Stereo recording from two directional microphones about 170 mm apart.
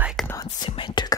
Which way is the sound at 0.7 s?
30° left (ahead or behind).